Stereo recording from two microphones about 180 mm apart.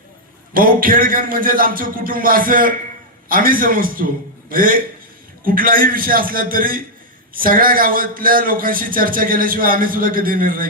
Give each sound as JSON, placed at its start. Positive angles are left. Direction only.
{"t": 0.5, "sound": "speech", "side_deg": -50}